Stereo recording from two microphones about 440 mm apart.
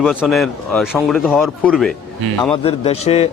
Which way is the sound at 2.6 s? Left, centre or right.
Centre.